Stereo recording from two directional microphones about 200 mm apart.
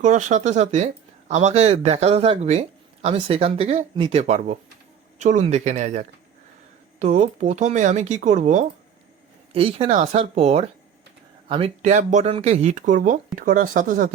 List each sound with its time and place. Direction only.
0.0 s speech: 40° right (ahead or behind)